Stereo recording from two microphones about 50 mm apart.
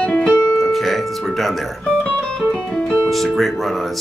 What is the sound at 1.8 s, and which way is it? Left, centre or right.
Music, centre.